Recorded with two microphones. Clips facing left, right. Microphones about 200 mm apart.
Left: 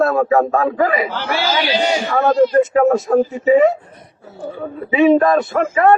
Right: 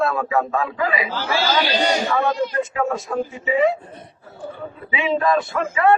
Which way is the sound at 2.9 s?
50° left (ahead or behind).